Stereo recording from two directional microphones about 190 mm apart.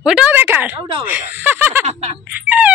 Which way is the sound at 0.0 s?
5° right (ahead or behind).